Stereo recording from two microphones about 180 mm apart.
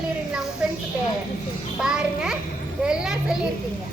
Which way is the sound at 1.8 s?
5° right (ahead or behind).